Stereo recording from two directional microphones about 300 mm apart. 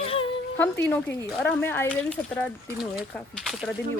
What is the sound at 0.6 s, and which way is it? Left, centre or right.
Speech, centre.